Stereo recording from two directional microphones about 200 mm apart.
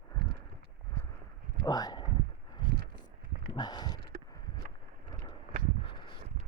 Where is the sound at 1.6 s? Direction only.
20° left (ahead or behind).